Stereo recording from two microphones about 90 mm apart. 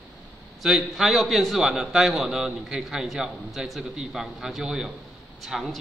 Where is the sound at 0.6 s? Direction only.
5° right (ahead or behind).